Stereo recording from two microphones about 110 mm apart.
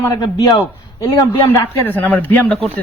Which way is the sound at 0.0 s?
35° left (ahead or behind).